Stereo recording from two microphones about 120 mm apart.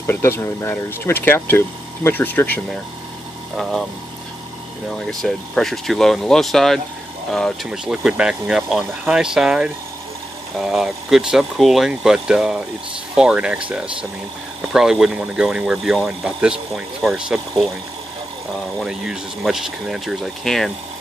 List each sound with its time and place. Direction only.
0.0 s speech: 20° left (ahead or behind)
3.5 s speech: centre (ahead or behind)
4.8 s speech: 5° left (ahead or behind)
18.8 s speech: 5° right (ahead or behind)